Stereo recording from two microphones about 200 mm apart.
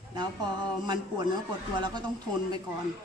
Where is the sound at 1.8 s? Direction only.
20° right (ahead or behind).